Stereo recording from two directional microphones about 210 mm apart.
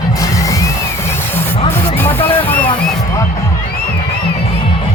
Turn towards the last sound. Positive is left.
turn(degrees=10)  # may be behind; listen again after turning